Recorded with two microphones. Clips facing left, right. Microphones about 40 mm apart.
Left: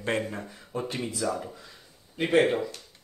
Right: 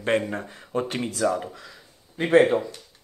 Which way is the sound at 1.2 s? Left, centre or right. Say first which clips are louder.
Right 7 dB; right.